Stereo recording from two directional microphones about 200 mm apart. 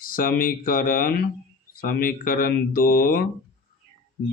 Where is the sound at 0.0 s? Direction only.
45° left (ahead or behind).